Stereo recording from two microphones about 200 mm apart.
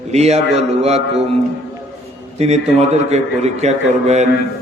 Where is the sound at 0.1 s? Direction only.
35° right (ahead or behind).